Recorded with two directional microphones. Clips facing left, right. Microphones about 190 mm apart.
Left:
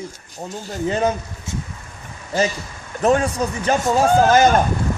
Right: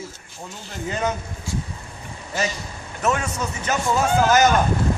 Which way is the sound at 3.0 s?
35° left (ahead or behind).